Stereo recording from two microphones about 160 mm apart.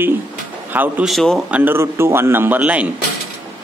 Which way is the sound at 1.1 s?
Centre (ahead or behind).